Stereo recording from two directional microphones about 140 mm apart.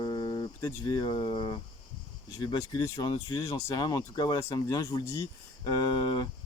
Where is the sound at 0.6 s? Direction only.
30° left (ahead or behind).